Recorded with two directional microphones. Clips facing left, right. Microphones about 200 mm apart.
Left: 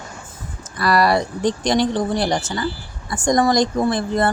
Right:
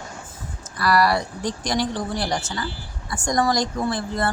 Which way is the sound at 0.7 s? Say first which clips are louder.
Left 3 dB; 20° left (ahead or behind).